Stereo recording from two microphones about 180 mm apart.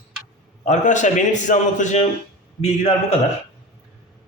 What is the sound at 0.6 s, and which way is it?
A man's voice, 40° left (ahead or behind).